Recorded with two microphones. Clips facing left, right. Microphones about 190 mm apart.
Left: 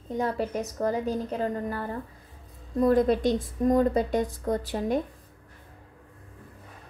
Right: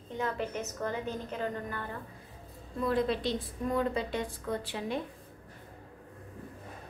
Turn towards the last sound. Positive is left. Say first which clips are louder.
# left 7 dB
turn(degrees=45)  # may be behind; listen again after turning